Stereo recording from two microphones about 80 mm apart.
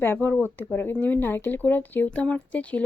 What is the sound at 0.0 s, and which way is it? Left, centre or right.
Speech, left.